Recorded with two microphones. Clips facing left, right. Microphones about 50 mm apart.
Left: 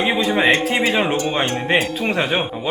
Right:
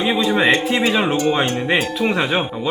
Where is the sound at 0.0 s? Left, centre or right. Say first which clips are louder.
Even; left.